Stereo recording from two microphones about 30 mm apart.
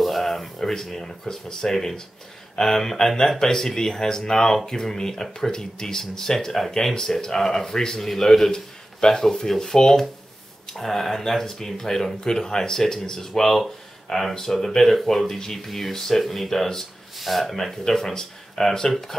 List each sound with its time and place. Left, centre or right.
0.0 s a man's voice: centre
15.3 s speech: left
15.6 s speech: centre